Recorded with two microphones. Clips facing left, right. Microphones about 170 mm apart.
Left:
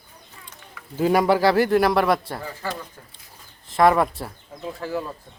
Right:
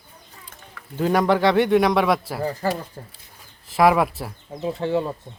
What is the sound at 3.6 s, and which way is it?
Speech, 5° right (ahead or behind).